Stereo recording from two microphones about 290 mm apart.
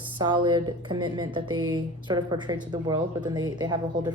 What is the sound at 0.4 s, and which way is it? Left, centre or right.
Speech, centre.